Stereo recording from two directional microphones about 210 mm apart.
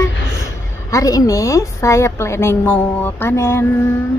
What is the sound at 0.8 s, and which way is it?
A woman's voice, 15° left (ahead or behind).